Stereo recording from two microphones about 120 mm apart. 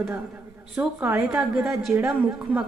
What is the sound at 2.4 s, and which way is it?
Speech, 10° right (ahead or behind).